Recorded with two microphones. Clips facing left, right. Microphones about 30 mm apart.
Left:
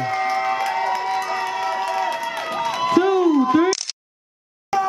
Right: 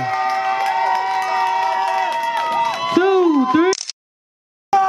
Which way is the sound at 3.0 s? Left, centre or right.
Right.